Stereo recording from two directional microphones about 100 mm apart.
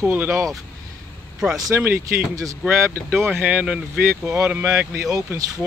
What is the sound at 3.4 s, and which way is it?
Speech, 10° right (ahead or behind).